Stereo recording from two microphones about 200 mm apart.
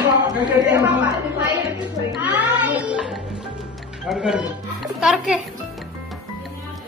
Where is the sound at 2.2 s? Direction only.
10° right (ahead or behind).